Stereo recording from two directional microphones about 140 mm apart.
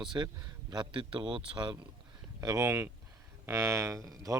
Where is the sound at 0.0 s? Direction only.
35° right (ahead or behind).